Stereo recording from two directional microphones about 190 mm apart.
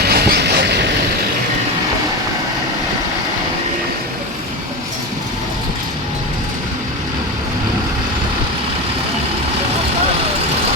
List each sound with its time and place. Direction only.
0.0 s vehicle: 55° right (ahead or behind)